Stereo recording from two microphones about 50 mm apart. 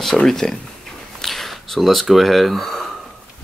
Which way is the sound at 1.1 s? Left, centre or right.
Centre.